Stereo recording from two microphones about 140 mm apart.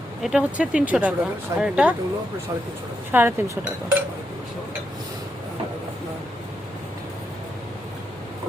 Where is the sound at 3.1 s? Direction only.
15° right (ahead or behind).